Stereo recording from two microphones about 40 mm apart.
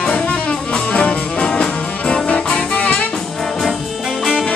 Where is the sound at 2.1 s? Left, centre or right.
Left.